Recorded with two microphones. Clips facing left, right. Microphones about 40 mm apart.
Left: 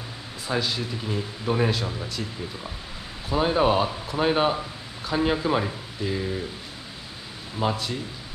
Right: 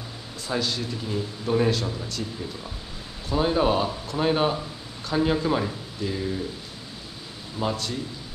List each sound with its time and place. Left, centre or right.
0.5 s speech: centre
3.3 s speech: centre
7.6 s speech: centre